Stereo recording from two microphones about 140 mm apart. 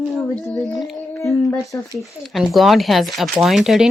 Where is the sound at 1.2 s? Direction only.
20° left (ahead or behind).